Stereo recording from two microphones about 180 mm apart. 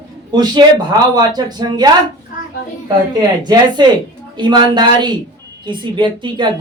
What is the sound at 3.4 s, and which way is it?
Speech, 25° right (ahead or behind).